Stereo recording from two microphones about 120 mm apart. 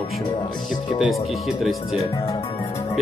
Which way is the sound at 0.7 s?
40° left (ahead or behind).